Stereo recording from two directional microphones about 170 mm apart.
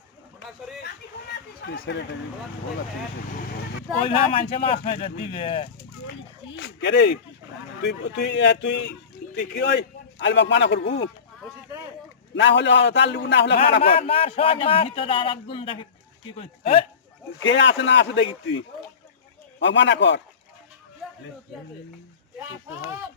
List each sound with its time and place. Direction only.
1.6 s speech: 75° left (ahead or behind)
4.0 s speech: 30° left (ahead or behind)
6.5 s a man's voice: 90° left
12.3 s a man's voice: 90° left
13.8 s speech: 35° left (ahead or behind)
17.4 s a man's voice: 90° left
19.5 s a man's voice: 90° left